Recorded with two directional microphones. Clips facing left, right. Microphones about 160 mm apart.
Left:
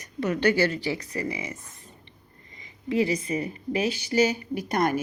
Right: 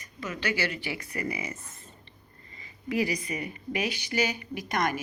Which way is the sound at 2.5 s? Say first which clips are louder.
Left 4 dB; 20° left (ahead or behind).